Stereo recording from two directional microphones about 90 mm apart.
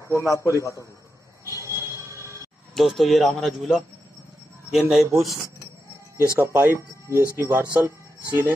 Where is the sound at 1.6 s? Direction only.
35° right (ahead or behind).